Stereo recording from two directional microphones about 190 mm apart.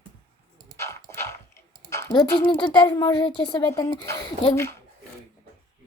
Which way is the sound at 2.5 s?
25° left (ahead or behind).